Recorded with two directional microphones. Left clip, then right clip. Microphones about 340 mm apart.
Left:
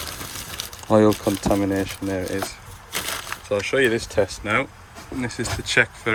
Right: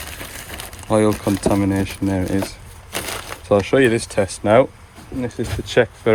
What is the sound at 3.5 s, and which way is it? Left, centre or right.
Speech, centre.